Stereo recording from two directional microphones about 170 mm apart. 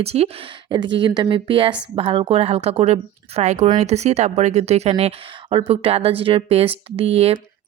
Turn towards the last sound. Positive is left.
turn(degrees=-35)  # may be behind; listen again after turning